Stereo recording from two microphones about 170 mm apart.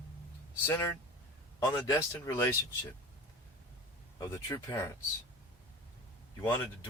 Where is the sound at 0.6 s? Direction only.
15° left (ahead or behind).